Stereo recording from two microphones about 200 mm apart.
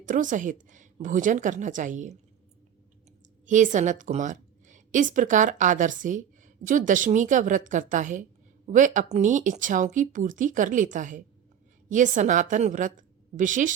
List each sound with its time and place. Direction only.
0.0 s a woman's voice: 40° right (ahead or behind)
3.4 s a woman's voice: 40° right (ahead or behind)